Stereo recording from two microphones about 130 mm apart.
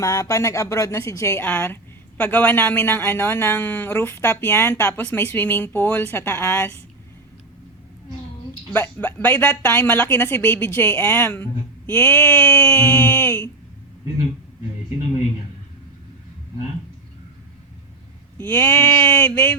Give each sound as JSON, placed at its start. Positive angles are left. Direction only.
{"t": 0.0, "sound": "speech", "side_deg": 25}
{"t": 8.7, "sound": "speech", "side_deg": 15}
{"t": 18.3, "sound": "speech", "side_deg": 15}